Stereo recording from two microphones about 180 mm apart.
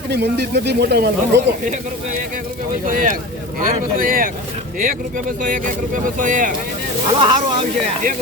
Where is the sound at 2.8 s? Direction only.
50° right (ahead or behind).